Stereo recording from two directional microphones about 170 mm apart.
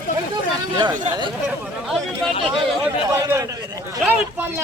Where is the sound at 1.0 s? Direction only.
25° right (ahead or behind).